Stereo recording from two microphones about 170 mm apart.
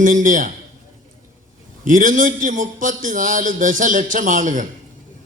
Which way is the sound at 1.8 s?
50° right (ahead or behind).